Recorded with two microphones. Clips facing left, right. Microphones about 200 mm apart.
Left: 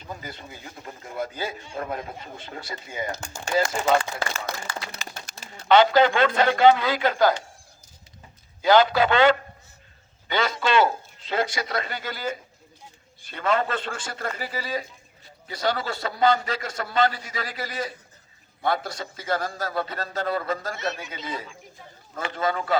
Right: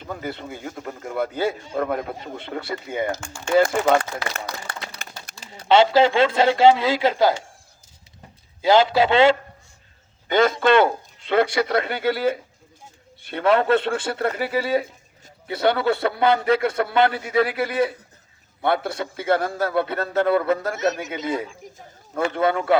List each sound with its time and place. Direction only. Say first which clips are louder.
0.0 s a man's voice: right 7 dB; 60° right (ahead or behind)
1.6 s a man's voice: right 8 dB; 40° right (ahead or behind)
1.9 s a man's voice: right 6 dB; 60° right (ahead or behind)
5.6 s a man's voice: right 2 dB; 25° right (ahead or behind)
8.6 s a man's voice: right 2 dB; 25° right (ahead or behind)
10.2 s a man's voice: right 7 dB; 50° right (ahead or behind)
20.7 s a man's voice: right 8 dB; 45° right (ahead or behind)
21.1 s speech: right 8 dB; 60° right (ahead or behind)